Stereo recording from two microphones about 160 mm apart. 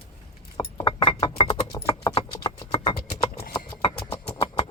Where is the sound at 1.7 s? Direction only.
20° left (ahead or behind).